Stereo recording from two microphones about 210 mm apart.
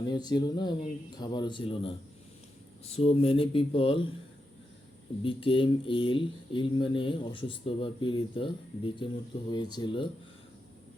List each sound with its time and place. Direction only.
0.0 s speech: 20° left (ahead or behind)
5.2 s speech: 25° left (ahead or behind)